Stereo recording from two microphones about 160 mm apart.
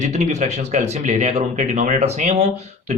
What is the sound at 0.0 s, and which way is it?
Speech, 45° right (ahead or behind).